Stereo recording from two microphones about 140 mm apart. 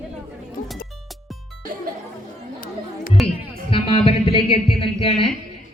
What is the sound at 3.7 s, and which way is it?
Speech, 40° left (ahead or behind).